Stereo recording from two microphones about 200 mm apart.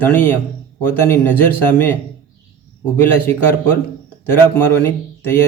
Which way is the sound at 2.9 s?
10° left (ahead or behind).